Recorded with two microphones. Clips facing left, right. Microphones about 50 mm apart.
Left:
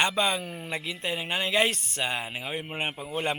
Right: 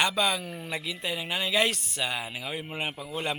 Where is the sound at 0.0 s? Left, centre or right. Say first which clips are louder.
Left 1 dB; left.